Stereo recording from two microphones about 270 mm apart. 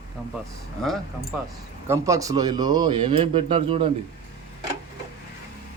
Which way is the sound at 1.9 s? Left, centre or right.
Centre.